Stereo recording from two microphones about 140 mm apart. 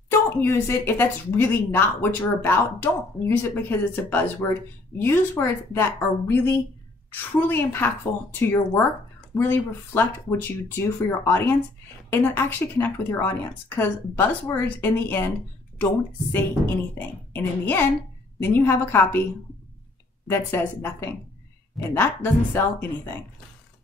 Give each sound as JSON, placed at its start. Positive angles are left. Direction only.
{"t": 0.3, "sound": "speech", "side_deg": 15}
{"t": 20.2, "sound": "speech", "side_deg": 15}